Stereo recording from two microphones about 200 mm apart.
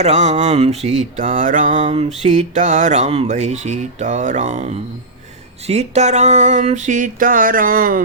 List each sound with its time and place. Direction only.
0.0 s mantra: 35° right (ahead or behind)